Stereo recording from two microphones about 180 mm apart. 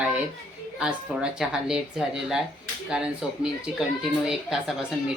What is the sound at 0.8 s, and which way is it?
A woman's voice, 5° right (ahead or behind).